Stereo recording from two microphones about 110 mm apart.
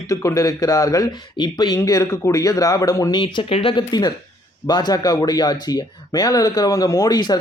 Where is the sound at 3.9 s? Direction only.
40° left (ahead or behind).